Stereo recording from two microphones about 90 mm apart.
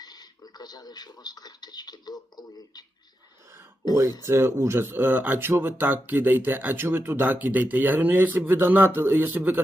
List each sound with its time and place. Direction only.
0.0 s a man's voice: 50° left (ahead or behind)
4.3 s speech: 30° right (ahead or behind)